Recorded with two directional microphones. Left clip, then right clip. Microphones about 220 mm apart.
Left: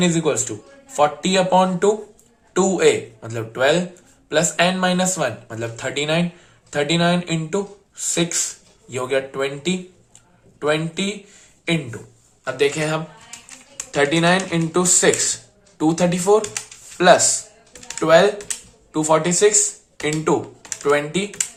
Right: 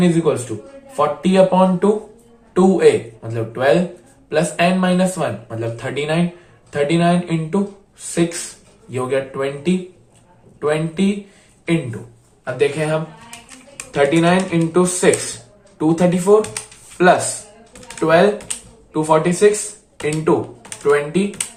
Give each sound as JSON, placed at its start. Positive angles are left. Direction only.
{"t": 0.0, "sound": "speech", "side_deg": 45}
{"t": 20.8, "sound": "speech", "side_deg": 45}